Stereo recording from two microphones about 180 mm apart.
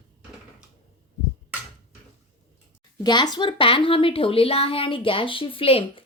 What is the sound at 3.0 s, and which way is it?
A woman's voice, 25° left (ahead or behind).